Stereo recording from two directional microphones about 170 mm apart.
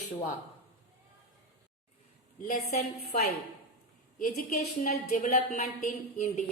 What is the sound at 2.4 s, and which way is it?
Speech, 40° left (ahead or behind).